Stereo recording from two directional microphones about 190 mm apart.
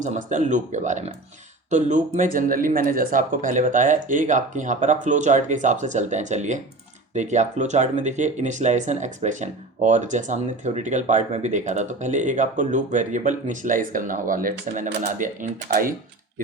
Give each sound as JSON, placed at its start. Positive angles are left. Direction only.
{"t": 0.0, "sound": "speech", "side_deg": -40}